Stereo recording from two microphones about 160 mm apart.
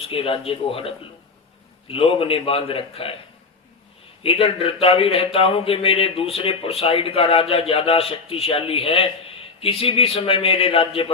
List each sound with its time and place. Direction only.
0.0 s a man's voice: 35° left (ahead or behind)
4.2 s a man's voice: 35° left (ahead or behind)